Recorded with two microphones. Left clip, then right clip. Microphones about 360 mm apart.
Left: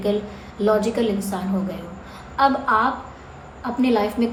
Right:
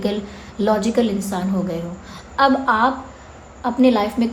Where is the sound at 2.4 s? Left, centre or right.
Right.